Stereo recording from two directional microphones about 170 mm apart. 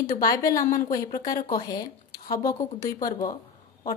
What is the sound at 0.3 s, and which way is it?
A woman's voice, 20° left (ahead or behind).